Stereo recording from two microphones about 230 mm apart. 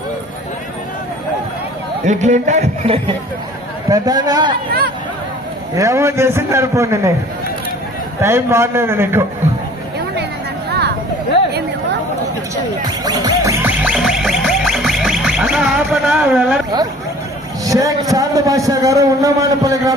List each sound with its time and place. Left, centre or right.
2.0 s a man's voice: right
3.9 s a man's voice: centre
5.8 s a man's voice: centre
8.2 s a man's voice: centre
10.7 s vehicle: right
12.8 s music: centre
17.6 s a man's voice: centre